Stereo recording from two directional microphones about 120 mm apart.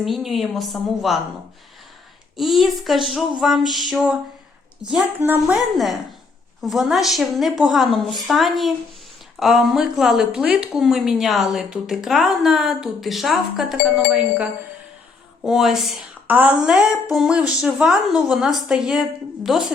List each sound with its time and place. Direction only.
0.0 s a woman's voice: centre (ahead or behind)
2.3 s a woman's voice: centre (ahead or behind)
5.2 s a woman's voice: 15° right (ahead or behind)
5.5 s a woman's voice: centre (ahead or behind)
15.4 s a woman's voice: 5° right (ahead or behind)